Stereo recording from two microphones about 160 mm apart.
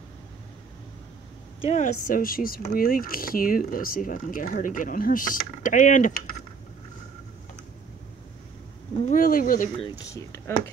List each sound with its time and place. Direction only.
1.6 s speech: 45° left (ahead or behind)
2.0 s speech: 60° left (ahead or behind)
9.0 s speech: 55° left (ahead or behind)
9.8 s speech: 30° left (ahead or behind)